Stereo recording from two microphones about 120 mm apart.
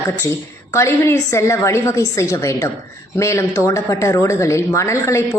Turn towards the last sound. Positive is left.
turn(degrees=25)  # may be behind; listen again after turning